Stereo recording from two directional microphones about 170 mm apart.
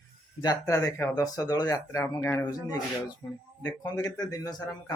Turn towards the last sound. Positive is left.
turn(degrees=20)  # may be behind; listen again after turning